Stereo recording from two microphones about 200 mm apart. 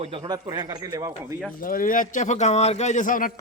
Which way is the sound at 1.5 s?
45° left (ahead or behind).